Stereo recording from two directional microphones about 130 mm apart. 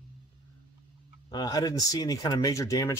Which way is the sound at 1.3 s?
30° left (ahead or behind).